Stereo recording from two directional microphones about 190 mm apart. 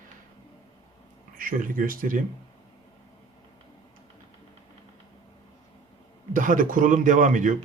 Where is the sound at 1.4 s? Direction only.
45° right (ahead or behind).